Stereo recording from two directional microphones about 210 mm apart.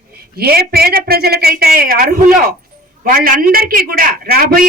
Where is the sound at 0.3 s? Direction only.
45° right (ahead or behind).